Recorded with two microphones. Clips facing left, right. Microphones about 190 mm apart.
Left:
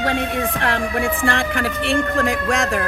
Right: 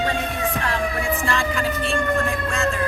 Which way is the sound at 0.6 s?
60° left (ahead or behind).